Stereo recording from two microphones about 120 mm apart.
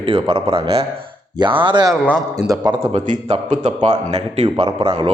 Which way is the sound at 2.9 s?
70° right (ahead or behind).